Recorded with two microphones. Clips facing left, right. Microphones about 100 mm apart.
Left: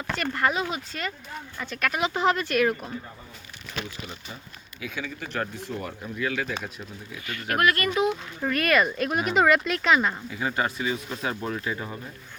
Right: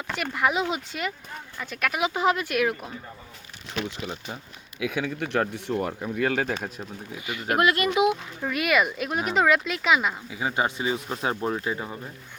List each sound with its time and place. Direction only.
0.1 s speech: 10° right (ahead or behind)
3.7 s speech: 75° right (ahead or behind); by 6.5 s 55° right (ahead or behind)
6.6 s speech: 40° right (ahead or behind)
7.3 s speech: 20° right (ahead or behind)
8.4 s speech: 5° right (ahead or behind); by 11.9 s 20° right (ahead or behind)